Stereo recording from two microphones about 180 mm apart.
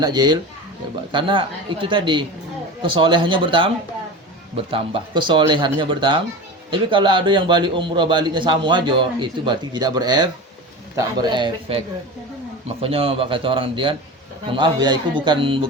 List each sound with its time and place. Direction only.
0.0 s a man's voice: 25° right (ahead or behind)